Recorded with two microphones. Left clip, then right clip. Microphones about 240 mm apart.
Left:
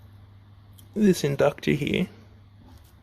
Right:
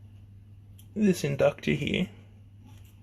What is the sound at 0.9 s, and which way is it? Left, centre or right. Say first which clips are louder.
Speech: left 4 dB; left.